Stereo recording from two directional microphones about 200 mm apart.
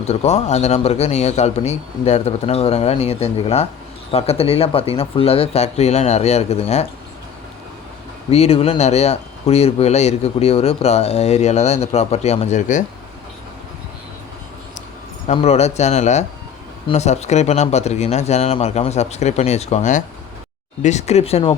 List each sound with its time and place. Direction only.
0.0 s speech: 30° left (ahead or behind)
8.3 s speech: 30° left (ahead or behind)
15.3 s speech: 30° left (ahead or behind)